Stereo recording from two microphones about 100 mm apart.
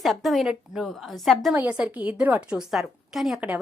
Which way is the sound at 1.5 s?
15° right (ahead or behind).